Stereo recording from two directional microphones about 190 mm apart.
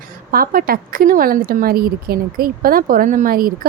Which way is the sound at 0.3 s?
50° right (ahead or behind).